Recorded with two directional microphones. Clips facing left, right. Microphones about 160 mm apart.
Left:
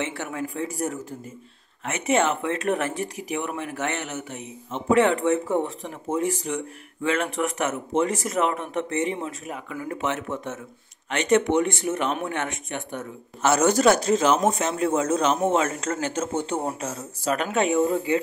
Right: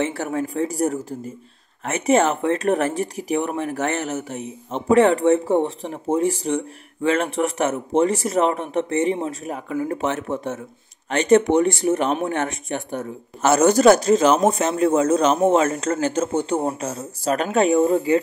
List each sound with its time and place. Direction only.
0.0 s speech: 35° right (ahead or behind)